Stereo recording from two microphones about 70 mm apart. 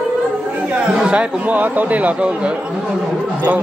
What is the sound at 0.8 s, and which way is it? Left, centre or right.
Speech, centre.